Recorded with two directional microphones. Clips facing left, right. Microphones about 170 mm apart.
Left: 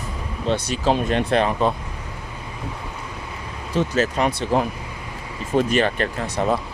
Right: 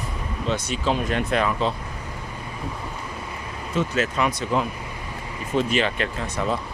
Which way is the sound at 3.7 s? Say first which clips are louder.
Left 3 dB; 35° left (ahead or behind).